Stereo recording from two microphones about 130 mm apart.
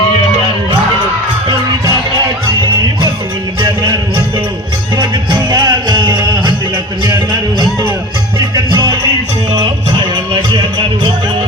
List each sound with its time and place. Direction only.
4.9 s music: 35° right (ahead or behind)
7.6 s music: 25° right (ahead or behind)